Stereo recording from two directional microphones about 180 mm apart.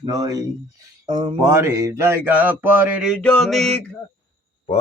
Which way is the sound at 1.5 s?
15° right (ahead or behind).